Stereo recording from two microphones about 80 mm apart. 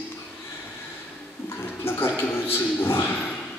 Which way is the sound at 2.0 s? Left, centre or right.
Left.